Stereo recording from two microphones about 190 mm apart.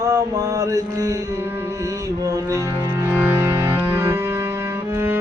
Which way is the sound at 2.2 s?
15° right (ahead or behind).